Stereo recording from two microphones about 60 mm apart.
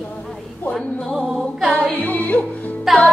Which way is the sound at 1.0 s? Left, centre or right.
Centre.